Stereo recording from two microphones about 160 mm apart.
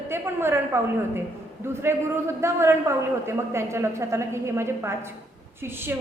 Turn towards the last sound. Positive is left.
turn(degrees=-15)  # may be behind; listen again after turning